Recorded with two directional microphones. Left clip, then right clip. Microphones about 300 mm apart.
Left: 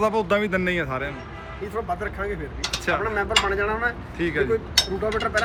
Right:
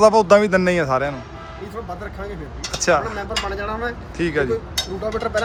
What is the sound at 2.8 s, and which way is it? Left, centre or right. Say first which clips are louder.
Speech: right 6 dB; centre.